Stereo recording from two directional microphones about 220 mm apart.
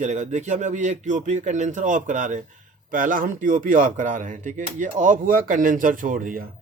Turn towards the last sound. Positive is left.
turn(degrees=-40)  # may be behind; listen again after turning